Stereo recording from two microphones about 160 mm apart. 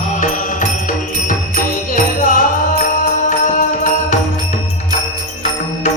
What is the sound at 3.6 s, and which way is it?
Music, 50° left (ahead or behind).